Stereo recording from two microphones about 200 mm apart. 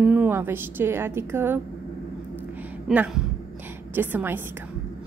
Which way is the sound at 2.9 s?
5° right (ahead or behind).